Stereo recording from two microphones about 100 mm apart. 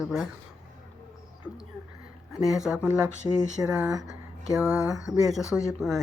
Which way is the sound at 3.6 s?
10° right (ahead or behind).